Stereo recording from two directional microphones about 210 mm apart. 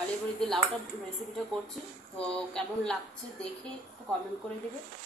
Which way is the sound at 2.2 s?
5° left (ahead or behind).